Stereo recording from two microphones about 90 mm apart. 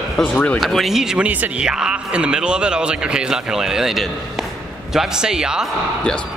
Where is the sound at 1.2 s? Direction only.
15° right (ahead or behind).